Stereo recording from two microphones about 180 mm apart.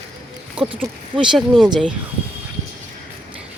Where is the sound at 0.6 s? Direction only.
30° right (ahead or behind).